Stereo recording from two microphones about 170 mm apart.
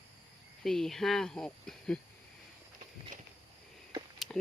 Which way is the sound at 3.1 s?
50° right (ahead or behind).